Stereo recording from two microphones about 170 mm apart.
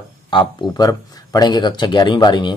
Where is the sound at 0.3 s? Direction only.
25° left (ahead or behind).